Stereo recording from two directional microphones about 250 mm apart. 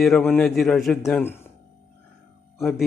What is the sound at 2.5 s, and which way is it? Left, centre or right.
Speech, centre.